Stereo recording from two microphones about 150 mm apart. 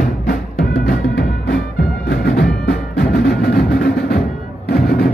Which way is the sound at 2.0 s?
90° left.